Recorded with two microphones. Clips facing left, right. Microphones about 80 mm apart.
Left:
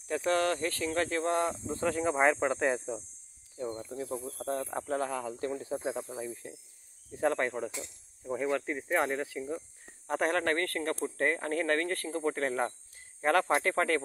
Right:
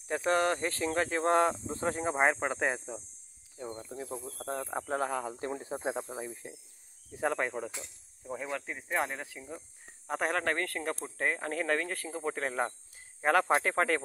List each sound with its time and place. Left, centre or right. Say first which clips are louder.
0.1 s speech: even; right
1.3 s speech: right 7 dB; right
1.7 s speech: left 2 dB; right
2.2 s speech: left 2 dB; centre
4.8 s speech: right 3 dB; centre
7.2 s speech: left 2 dB; centre